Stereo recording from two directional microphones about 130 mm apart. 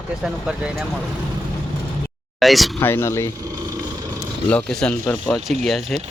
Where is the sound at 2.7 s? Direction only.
15° left (ahead or behind).